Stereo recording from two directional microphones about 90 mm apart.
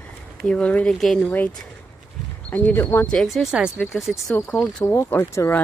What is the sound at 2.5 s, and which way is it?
Speech, 20° left (ahead or behind).